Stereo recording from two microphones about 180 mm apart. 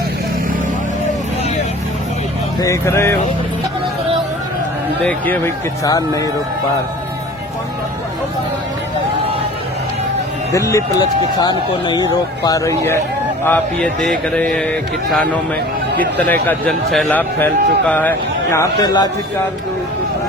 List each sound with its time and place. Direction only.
2.6 s a man's voice: 15° left (ahead or behind)
5.0 s a man's voice: 10° left (ahead or behind)
10.5 s a man's voice: 15° left (ahead or behind)